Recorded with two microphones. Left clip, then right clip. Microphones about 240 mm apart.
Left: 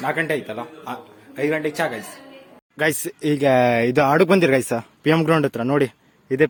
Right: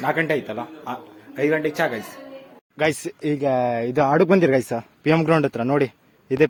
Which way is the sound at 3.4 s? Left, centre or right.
Left.